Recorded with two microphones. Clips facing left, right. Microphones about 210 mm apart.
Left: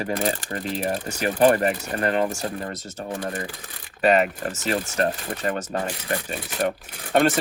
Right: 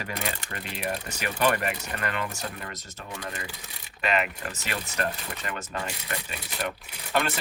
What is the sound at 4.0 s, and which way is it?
Speech, 40° left (ahead or behind).